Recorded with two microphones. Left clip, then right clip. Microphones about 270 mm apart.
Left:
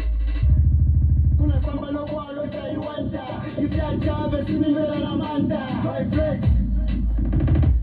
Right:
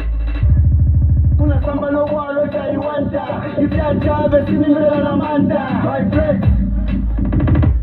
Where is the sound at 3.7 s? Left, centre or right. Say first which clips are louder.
Right 9 dB; right.